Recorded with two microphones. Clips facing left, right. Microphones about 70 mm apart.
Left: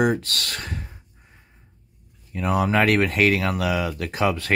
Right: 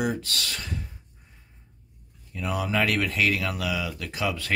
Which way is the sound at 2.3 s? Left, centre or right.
Left.